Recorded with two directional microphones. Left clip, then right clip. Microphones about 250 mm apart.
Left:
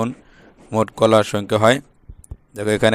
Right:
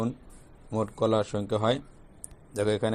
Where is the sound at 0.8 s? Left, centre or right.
Left.